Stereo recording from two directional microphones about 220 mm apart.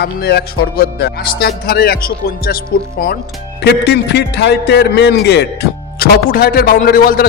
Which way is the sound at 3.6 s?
50° left (ahead or behind).